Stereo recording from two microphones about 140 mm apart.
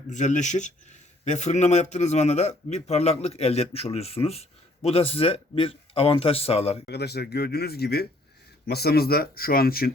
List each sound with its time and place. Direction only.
0.1 s a man's voice: 60° left (ahead or behind)
7.4 s speech: 90° left